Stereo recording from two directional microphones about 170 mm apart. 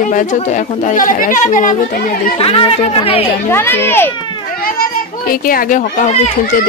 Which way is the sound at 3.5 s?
15° left (ahead or behind).